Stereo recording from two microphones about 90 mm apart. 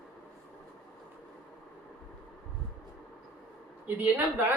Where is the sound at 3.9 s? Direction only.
20° right (ahead or behind).